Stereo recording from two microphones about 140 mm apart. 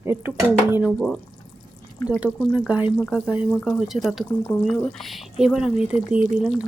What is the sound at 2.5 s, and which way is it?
Speech, 10° right (ahead or behind).